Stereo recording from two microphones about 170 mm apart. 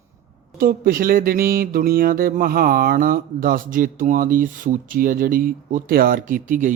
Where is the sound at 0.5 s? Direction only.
60° right (ahead or behind).